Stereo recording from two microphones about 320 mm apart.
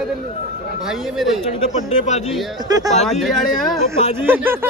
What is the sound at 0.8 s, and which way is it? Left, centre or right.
Speech, centre.